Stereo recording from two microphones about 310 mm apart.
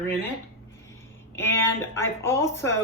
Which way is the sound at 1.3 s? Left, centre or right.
Centre.